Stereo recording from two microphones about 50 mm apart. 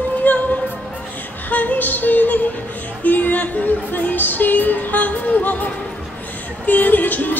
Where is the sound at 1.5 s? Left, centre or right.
Left.